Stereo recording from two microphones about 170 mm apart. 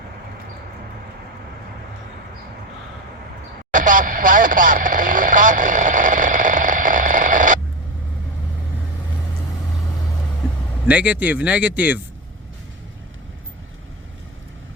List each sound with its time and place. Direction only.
3.7 s radio: 50° right (ahead or behind)
10.8 s speech: 10° right (ahead or behind)